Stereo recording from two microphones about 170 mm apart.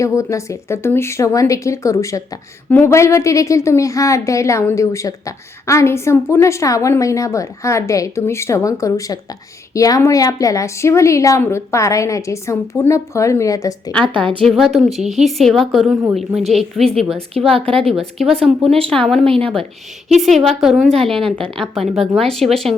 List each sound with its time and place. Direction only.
0.2 s a woman's voice: 15° left (ahead or behind)
14.0 s a woman's voice: 30° right (ahead or behind)
14.4 s speech: centre (ahead or behind)
17.7 s a woman's voice: 35° right (ahead or behind)
17.9 s speech: centre (ahead or behind)
19.2 s a woman's voice: 35° right (ahead or behind)
20.2 s speech: centre (ahead or behind)
21.2 s a woman's voice: 30° right (ahead or behind)
21.5 s speech: centre (ahead or behind)